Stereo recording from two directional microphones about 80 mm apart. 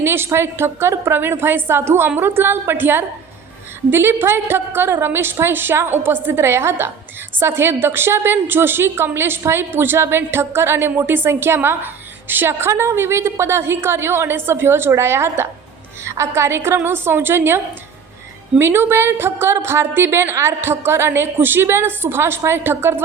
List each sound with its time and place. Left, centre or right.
0.0 s a woman's voice: right
18.6 s a woman's voice: right